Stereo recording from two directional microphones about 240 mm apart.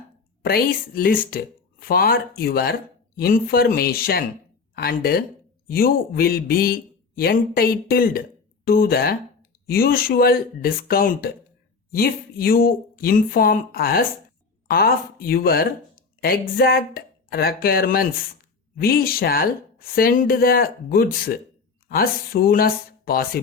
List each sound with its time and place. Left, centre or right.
0.4 s speech: left